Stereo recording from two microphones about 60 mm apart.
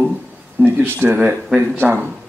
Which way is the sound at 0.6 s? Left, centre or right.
Right.